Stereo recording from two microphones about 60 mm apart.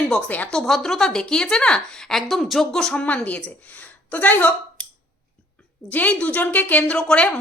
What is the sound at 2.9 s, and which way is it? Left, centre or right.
Speech, left.